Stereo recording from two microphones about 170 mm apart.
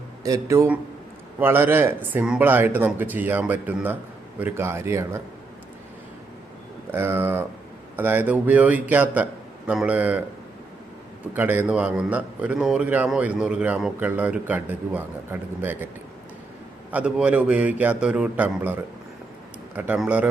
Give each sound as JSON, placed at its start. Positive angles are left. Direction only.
{"t": 0.2, "sound": "a man's voice", "side_deg": -20}
{"t": 6.9, "sound": "a man's voice", "side_deg": -15}
{"t": 11.3, "sound": "a man's voice", "side_deg": -10}
{"t": 16.9, "sound": "a man's voice", "side_deg": -5}